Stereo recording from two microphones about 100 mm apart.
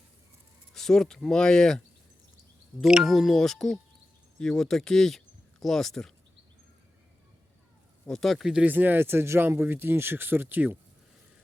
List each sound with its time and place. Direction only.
0.7 s speech: 5° left (ahead or behind)
2.8 s speech: 5° right (ahead or behind)
8.0 s speech: 5° left (ahead or behind)
8.6 s speech: 20° right (ahead or behind)